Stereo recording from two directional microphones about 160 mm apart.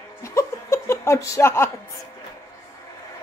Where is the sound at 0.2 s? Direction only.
15° left (ahead or behind).